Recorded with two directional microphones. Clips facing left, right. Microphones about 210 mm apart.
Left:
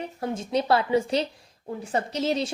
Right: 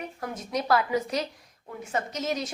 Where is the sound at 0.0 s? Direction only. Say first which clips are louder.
Left 5 dB; 25° left (ahead or behind).